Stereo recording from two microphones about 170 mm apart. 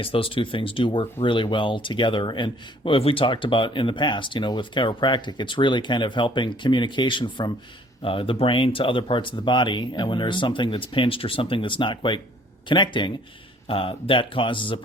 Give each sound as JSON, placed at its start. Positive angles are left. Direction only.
{"t": 0.0, "sound": "speech", "side_deg": 30}